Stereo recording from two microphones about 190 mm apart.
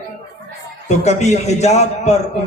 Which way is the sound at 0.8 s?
35° left (ahead or behind).